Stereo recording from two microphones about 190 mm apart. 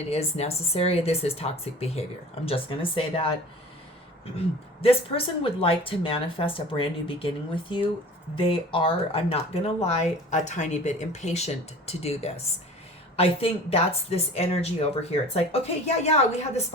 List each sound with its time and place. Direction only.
0.1 s speech: 35° left (ahead or behind)
4.8 s a woman's voice: 30° left (ahead or behind)